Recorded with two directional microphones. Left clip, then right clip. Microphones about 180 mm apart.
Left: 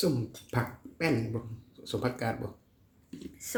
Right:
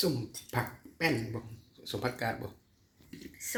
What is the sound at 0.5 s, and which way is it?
Speech, 10° left (ahead or behind).